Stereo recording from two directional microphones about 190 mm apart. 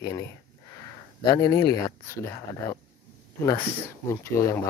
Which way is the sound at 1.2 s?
20° left (ahead or behind).